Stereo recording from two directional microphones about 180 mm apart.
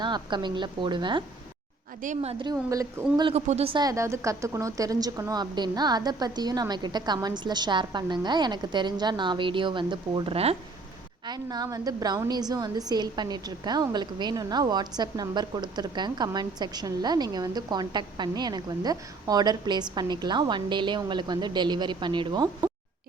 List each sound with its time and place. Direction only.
0.0 s a woman's voice: 25° right (ahead or behind)
2.0 s a woman's voice: 45° right (ahead or behind)
2.4 s a woman's voice: 20° right (ahead or behind)
3.3 s a woman's voice: 35° right (ahead or behind)
11.3 s a woman's voice: 20° right (ahead or behind)